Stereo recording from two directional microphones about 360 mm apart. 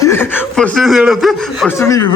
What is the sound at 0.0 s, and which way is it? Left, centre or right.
A man's voice, centre.